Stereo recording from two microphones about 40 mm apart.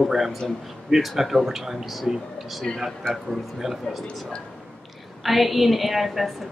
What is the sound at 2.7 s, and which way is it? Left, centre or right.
Speech, left.